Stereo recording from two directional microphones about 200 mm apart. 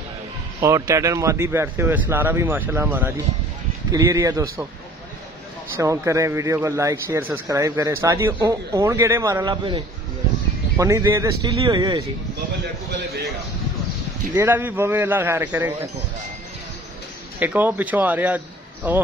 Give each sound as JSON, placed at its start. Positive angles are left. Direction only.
{"t": 0.6, "sound": "a man's voice", "side_deg": -15}
{"t": 5.8, "sound": "a man's voice", "side_deg": -15}
{"t": 14.3, "sound": "a man's voice", "side_deg": -10}
{"t": 17.4, "sound": "a man's voice", "side_deg": -10}